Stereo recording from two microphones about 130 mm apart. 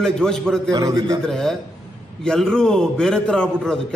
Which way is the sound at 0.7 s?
30° right (ahead or behind).